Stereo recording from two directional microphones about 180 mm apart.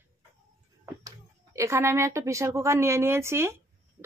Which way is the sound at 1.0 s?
15° right (ahead or behind).